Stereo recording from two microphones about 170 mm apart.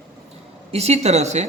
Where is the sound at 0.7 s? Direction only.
40° right (ahead or behind).